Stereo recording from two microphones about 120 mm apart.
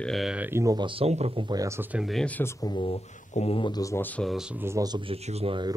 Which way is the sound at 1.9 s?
Centre (ahead or behind).